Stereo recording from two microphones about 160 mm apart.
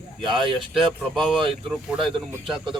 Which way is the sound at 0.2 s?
30° right (ahead or behind).